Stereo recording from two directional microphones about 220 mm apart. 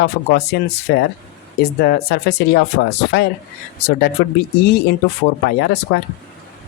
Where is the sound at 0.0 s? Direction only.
45° left (ahead or behind).